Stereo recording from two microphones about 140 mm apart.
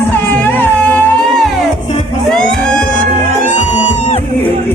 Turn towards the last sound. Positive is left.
turn(degrees=55)  # may be behind; listen again after turning